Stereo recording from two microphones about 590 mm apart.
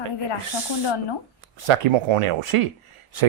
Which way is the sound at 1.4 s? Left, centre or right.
Right.